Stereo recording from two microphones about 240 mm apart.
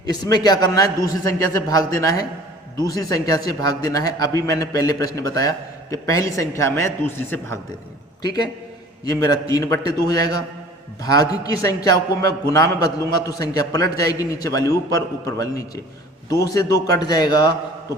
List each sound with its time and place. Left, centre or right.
0.0 s a man's voice: centre